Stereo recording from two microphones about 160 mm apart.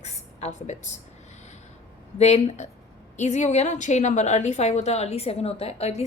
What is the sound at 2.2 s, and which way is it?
A woman's voice, 40° left (ahead or behind).